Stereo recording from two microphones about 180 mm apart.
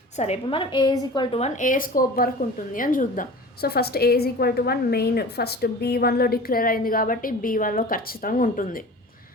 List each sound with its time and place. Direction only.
0.2 s a woman's voice: 35° left (ahead or behind); by 8.8 s 50° left (ahead or behind)